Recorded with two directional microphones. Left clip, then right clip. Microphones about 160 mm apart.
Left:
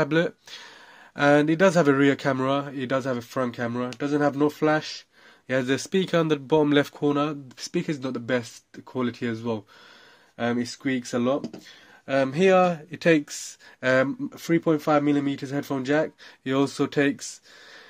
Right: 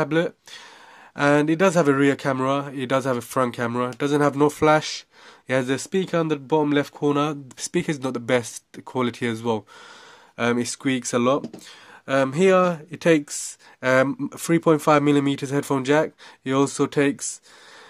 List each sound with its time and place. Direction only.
0.0 s speech: 10° right (ahead or behind); by 5.0 s 35° right (ahead or behind)
5.5 s speech: 20° right (ahead or behind)
7.1 s speech: 25° right (ahead or behind)
12.1 s speech: 25° right (ahead or behind)
14.3 s speech: 40° right (ahead or behind); by 17.4 s 25° right (ahead or behind)